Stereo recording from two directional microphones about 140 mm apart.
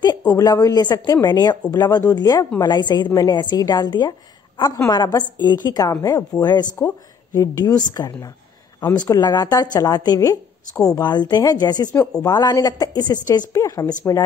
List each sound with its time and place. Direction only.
0.4 s a woman's voice: 25° left (ahead or behind)